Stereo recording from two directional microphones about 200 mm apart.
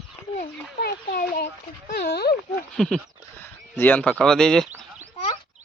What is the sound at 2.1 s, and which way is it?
Speech, 55° left (ahead or behind).